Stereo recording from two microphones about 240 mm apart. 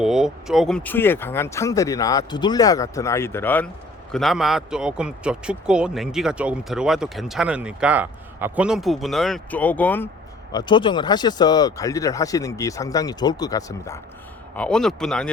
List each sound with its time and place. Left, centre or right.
0.0 s a man's voice: centre